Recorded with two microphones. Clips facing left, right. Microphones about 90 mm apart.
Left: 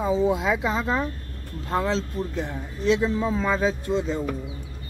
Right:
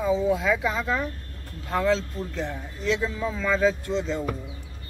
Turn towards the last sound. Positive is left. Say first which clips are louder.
# left 2 dB
turn(degrees=15)  # may be behind; listen again after turning